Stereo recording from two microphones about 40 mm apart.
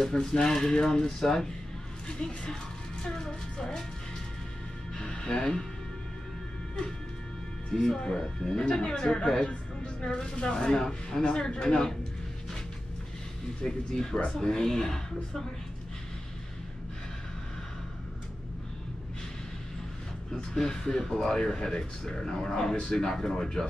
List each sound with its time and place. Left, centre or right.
0.0 s speech: centre
4.9 s music: centre
7.7 s speech: centre
13.6 s speech: centre
20.5 s speech: centre